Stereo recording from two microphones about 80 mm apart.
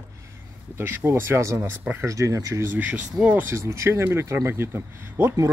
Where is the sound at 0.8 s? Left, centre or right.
Right.